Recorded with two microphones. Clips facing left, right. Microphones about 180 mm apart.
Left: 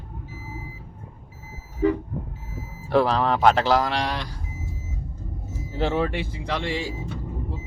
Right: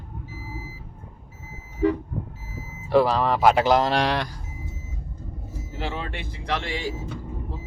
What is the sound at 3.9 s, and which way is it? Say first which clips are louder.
Speech: right 4 dB; 60° right (ahead or behind).